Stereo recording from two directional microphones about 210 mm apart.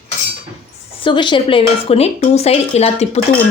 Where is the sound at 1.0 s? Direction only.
25° left (ahead or behind).